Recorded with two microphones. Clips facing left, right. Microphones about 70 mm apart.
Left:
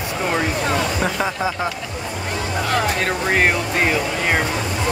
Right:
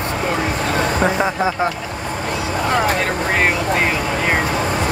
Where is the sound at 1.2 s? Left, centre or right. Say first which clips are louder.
Right 4 dB; centre.